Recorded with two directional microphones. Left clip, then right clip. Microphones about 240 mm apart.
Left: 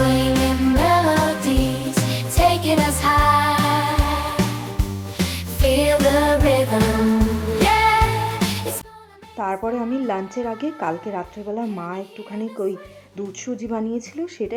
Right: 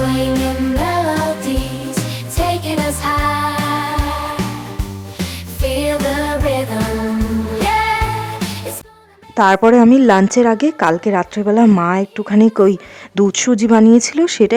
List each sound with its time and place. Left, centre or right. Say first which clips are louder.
0.1 s music: right 1 dB; centre
9.3 s a woman's voice: right 14 dB; right